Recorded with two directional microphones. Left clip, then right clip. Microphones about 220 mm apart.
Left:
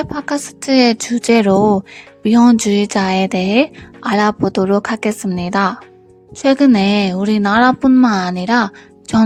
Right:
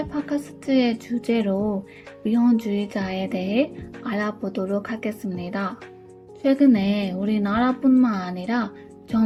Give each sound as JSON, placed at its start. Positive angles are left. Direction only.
{"t": 0.0, "sound": "a woman's voice", "side_deg": 55}